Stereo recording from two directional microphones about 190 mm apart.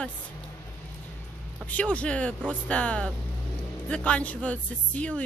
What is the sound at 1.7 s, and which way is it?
Speech, 5° left (ahead or behind).